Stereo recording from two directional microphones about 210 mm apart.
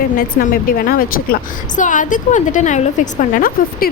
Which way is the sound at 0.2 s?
45° left (ahead or behind).